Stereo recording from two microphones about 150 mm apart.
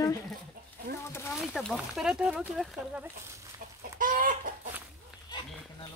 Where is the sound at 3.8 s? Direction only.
65° right (ahead or behind).